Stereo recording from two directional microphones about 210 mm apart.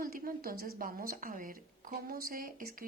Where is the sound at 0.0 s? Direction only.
45° right (ahead or behind).